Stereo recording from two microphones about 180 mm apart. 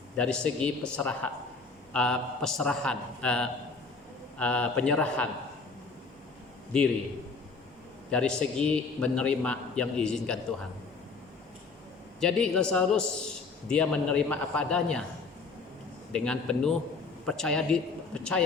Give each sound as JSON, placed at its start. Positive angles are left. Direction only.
{"t": 0.2, "sound": "a man's voice", "side_deg": 5}
{"t": 6.7, "sound": "a man's voice", "side_deg": 5}
{"t": 8.1, "sound": "a man's voice", "side_deg": 5}
{"t": 12.2, "sound": "a man's voice", "side_deg": 5}
{"t": 16.1, "sound": "a man's voice", "side_deg": 5}